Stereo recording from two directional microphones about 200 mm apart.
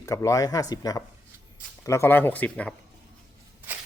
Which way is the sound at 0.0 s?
15° left (ahead or behind).